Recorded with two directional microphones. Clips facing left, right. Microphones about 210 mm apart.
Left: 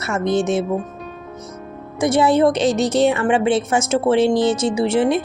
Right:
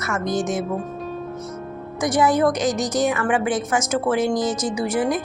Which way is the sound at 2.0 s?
25° left (ahead or behind).